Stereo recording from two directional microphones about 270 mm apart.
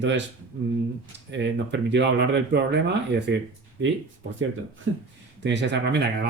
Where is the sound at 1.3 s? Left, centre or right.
Right.